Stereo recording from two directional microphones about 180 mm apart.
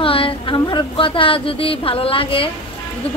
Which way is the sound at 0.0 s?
30° left (ahead or behind).